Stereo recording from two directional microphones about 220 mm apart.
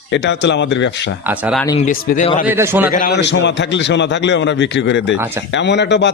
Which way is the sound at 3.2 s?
55° left (ahead or behind).